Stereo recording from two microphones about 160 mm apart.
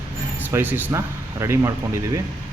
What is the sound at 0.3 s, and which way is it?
Speech, 10° right (ahead or behind).